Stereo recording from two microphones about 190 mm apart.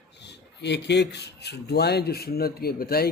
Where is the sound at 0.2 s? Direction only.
65° left (ahead or behind).